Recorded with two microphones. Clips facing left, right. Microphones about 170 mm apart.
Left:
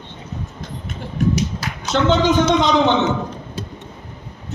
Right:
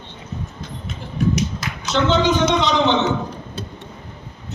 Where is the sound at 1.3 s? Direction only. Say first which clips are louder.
Left 1 dB; 35° left (ahead or behind).